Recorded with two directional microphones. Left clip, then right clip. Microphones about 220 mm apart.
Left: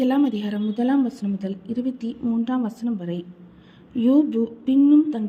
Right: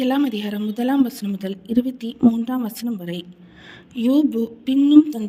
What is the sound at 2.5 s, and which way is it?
A woman's voice, centre (ahead or behind).